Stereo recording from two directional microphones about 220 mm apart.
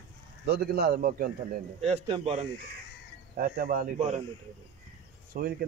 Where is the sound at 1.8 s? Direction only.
30° right (ahead or behind).